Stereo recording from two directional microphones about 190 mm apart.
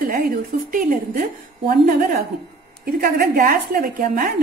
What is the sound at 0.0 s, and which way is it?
A woman's voice, 50° right (ahead or behind).